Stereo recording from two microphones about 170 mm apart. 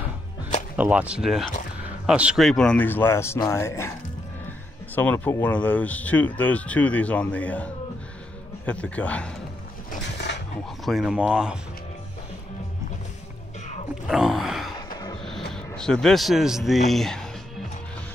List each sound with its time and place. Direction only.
0.7 s speech: 10° right (ahead or behind); by 3.9 s 15° left (ahead or behind)
4.9 s speech: 10° left (ahead or behind)
10.3 s a sound: 90° left
10.9 s speech: centre (ahead or behind)
14.0 s a sound: 5° right (ahead or behind)
15.5 s a man's voice: 5° left (ahead or behind)